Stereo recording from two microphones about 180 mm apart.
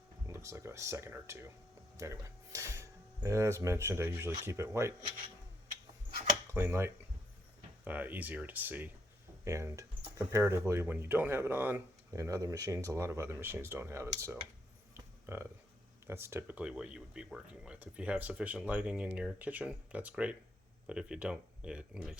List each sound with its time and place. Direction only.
0.3 s speech: 15° right (ahead or behind)
6.5 s speech: 15° right (ahead or behind)
14.9 s a sound: 15° right (ahead or behind)
16.0 s speech: 15° right (ahead or behind)